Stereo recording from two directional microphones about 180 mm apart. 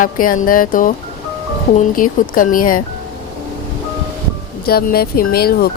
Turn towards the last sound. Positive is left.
turn(degrees=55)  # may be behind; listen again after turning